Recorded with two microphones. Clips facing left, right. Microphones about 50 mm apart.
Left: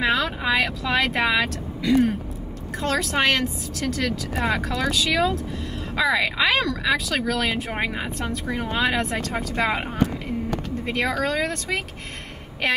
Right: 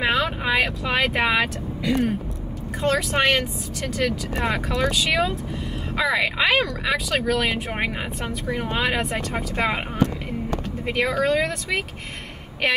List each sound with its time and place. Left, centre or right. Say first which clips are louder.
0.1 s vehicle: even; centre
0.6 s speech: right 1 dB; centre
8.8 s speech: left 1 dB; centre
9.6 s speech: even; centre
11.0 s speech: right 3 dB; centre